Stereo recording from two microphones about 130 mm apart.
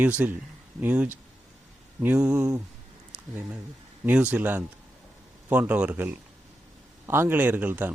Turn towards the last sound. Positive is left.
turn(degrees=-15)  # may be behind; listen again after turning